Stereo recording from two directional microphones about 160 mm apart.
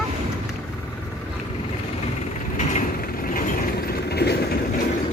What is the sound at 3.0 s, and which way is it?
Vehicle, 65° left (ahead or behind).